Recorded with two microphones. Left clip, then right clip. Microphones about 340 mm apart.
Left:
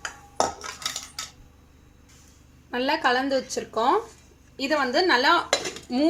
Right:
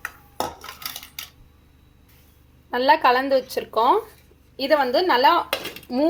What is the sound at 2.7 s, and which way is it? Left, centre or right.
A woman's voice, right.